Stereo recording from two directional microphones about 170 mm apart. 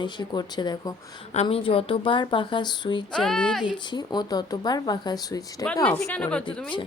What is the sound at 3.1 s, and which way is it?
Speech, 5° left (ahead or behind).